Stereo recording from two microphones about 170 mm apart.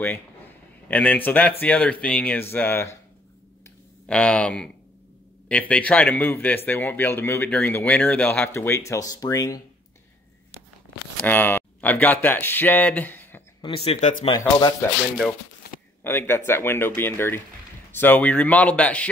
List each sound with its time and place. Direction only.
0.8 s a man's voice: 10° left (ahead or behind)
4.1 s a man's voice: 5° left (ahead or behind)
11.2 s speech: 10° left (ahead or behind)
13.8 s speech: 40° left (ahead or behind)
14.3 s speech: 20° left (ahead or behind)
16.0 s a man's voice: 15° left (ahead or behind)